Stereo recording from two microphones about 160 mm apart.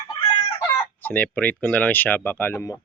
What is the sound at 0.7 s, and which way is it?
Speech, 15° left (ahead or behind).